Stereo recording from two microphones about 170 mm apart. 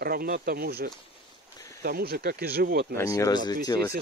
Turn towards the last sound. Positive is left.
turn(degrees=25)  # may be behind; listen again after turning